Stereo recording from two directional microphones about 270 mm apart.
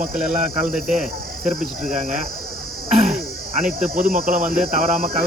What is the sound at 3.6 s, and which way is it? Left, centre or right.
Speech, right.